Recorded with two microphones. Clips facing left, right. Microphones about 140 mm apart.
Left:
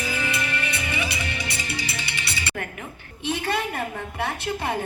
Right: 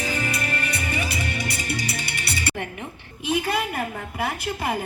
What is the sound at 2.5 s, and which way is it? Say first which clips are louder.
Music: right 2 dB; 25° right (ahead or behind).